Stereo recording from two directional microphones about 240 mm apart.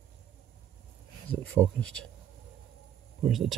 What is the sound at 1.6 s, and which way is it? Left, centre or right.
Speech, centre.